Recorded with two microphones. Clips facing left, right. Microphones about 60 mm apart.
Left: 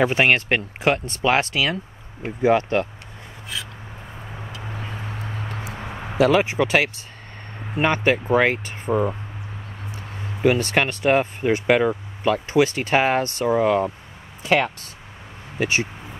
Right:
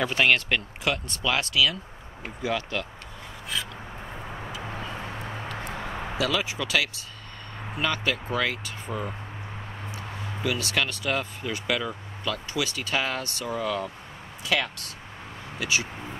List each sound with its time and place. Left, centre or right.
0.0 s speech: left
6.1 s speech: left
10.4 s speech: left